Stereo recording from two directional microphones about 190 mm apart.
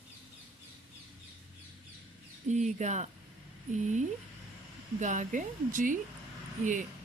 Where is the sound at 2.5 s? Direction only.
40° right (ahead or behind).